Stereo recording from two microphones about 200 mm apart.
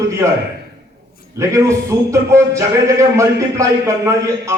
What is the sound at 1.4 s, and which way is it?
A man's voice, 15° right (ahead or behind).